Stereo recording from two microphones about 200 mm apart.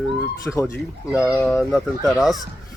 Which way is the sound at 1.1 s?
5° right (ahead or behind).